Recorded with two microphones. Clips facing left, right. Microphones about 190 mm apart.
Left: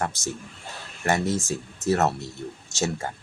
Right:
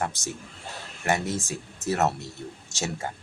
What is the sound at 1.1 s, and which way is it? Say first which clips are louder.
Speech: left 2 dB; 40° left (ahead or behind).